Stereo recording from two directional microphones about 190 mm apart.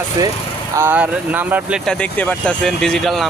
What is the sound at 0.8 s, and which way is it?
Speech, 10° right (ahead or behind).